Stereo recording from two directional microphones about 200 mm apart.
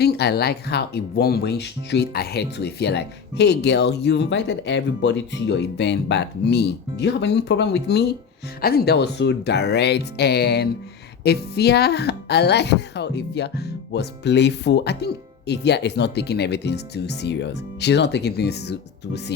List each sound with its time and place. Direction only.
0.0 s speech: 55° left (ahead or behind)